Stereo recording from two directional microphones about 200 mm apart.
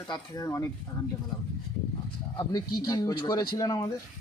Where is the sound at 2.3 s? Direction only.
20° left (ahead or behind).